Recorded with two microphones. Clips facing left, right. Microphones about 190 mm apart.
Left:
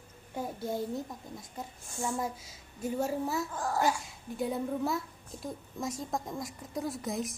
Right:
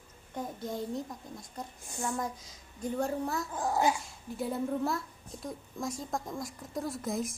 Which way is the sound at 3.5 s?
20° right (ahead or behind).